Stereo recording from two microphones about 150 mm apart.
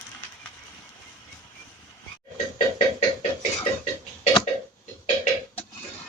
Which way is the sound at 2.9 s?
45° left (ahead or behind).